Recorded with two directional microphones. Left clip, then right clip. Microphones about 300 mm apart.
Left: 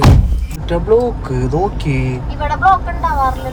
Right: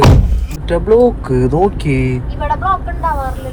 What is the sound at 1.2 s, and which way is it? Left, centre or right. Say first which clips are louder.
Speech: right 4 dB; right.